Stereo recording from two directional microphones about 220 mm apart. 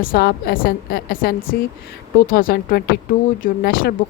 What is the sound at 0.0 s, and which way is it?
A woman's voice, 45° left (ahead or behind).